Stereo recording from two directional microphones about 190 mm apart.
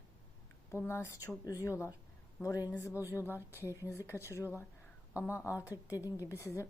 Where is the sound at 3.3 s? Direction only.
10° right (ahead or behind).